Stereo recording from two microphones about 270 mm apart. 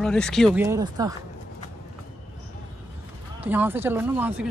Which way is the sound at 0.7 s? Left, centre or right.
Centre.